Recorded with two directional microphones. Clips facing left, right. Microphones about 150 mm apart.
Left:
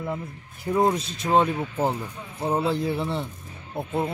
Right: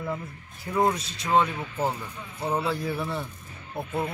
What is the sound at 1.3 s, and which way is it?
Speech, 35° left (ahead or behind).